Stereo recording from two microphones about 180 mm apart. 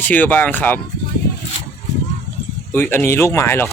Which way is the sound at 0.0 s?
10° left (ahead or behind).